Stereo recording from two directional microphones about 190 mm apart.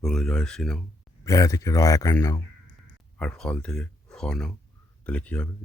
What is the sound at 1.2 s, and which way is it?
Speech, 15° left (ahead or behind).